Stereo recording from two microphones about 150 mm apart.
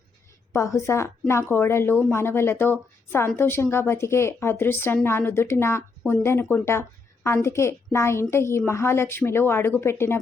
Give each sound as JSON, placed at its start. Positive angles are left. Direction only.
{"t": 0.5, "sound": "a woman's voice", "side_deg": 20}